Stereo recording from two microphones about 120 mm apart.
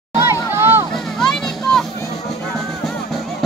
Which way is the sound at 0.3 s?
20° right (ahead or behind).